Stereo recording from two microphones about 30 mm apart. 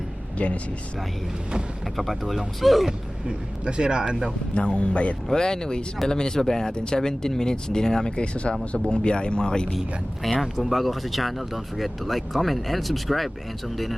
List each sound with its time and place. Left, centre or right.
0.3 s speech: left
2.0 s speech: centre
3.2 s a man's voice: right
4.5 s speech: left
5.3 s speech: left
6.7 s speech: left
8.1 s speech: left
10.2 s speech: centre